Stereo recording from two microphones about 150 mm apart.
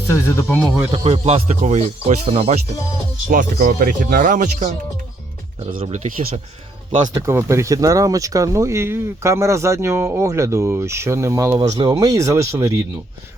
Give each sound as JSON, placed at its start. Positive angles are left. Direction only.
{"t": 0.1, "sound": "speech", "side_deg": 15}
{"t": 0.9, "sound": "speech", "side_deg": -40}
{"t": 3.2, "sound": "speech", "side_deg": -65}
{"t": 5.8, "sound": "speech", "side_deg": -50}
{"t": 7.1, "sound": "speech", "side_deg": -20}